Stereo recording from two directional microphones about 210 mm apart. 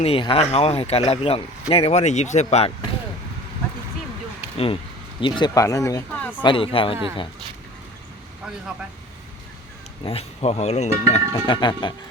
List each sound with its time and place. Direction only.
0.0 s speech: 25° left (ahead or behind)
4.5 s speech: 25° left (ahead or behind); by 6.3 s 10° left (ahead or behind)
6.4 s speech: 25° left (ahead or behind)
10.0 s speech: 25° left (ahead or behind)